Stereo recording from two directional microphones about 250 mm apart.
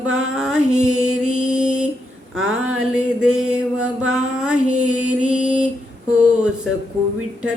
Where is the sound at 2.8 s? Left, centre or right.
Centre.